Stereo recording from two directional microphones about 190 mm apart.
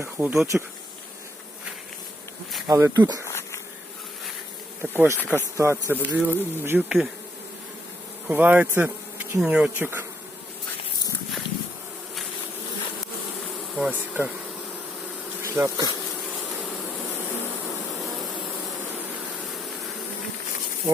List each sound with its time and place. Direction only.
0.0 s speech: 10° right (ahead or behind)
2.6 s speech: 15° right (ahead or behind)
3.2 s insect: 15° left (ahead or behind)
4.8 s speech: 10° right (ahead or behind)
8.3 s bee: 10° right (ahead or behind)
13.7 s bee: 5° right (ahead or behind)
15.4 s bee: 15° right (ahead or behind)